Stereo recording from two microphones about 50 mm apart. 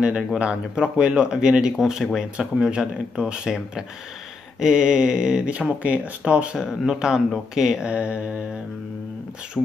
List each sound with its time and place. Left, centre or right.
0.4 s speech: centre
5.5 s speech: right
7.9 s speech: right